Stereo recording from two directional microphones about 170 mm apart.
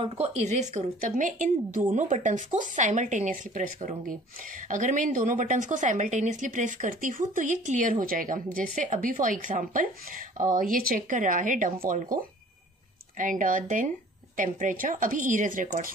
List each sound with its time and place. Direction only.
0.0 s a woman's voice: 40° right (ahead or behind)
13.2 s a woman's voice: 50° right (ahead or behind)